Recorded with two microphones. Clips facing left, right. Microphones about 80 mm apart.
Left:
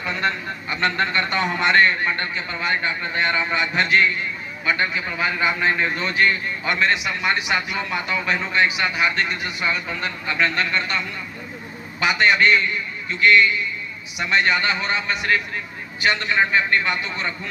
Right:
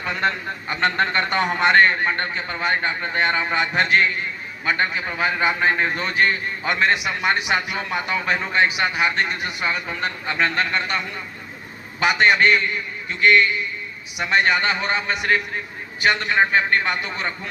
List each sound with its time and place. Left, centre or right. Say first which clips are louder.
0.0 s a man's voice: right 1 dB; right
7.0 s a man's voice: right 1 dB; right
11.9 s a man's voice: right 1 dB; right
14.4 s a man's voice: right 1 dB; right